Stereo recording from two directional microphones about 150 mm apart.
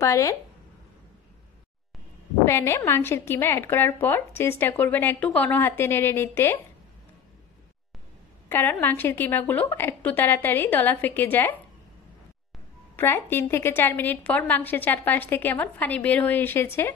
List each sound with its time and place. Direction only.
0.0 s a woman's voice: 20° left (ahead or behind)
2.4 s a woman's voice: 20° left (ahead or behind)
8.5 s a woman's voice: 15° left (ahead or behind)
12.9 s a woman's voice: 15° left (ahead or behind)